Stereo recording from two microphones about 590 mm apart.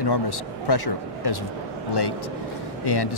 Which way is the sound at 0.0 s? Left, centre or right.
Left.